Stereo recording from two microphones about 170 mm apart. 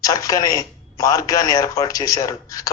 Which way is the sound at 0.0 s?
20° left (ahead or behind).